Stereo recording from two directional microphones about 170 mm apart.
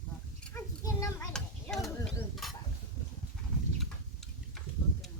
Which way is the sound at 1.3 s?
5° left (ahead or behind).